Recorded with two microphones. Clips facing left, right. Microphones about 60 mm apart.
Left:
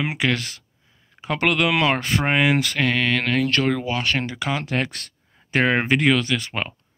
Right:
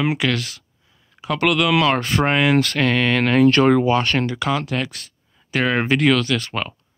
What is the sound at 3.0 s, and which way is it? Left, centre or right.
Speech, centre.